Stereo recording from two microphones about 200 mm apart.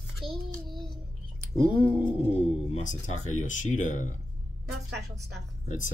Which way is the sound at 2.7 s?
35° left (ahead or behind).